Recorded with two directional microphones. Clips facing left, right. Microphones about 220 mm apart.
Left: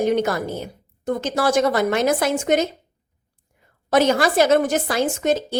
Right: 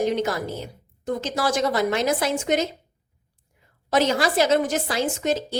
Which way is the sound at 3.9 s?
55° left (ahead or behind).